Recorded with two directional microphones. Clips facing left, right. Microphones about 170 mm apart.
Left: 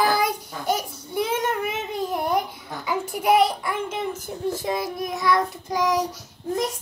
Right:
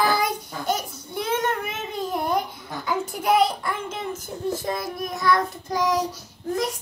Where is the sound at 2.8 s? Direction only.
10° left (ahead or behind).